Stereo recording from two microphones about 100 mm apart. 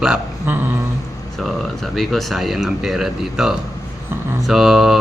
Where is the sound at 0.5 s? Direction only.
20° right (ahead or behind).